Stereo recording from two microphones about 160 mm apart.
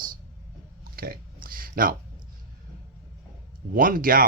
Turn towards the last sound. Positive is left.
turn(degrees=-65)  # may be behind; listen again after turning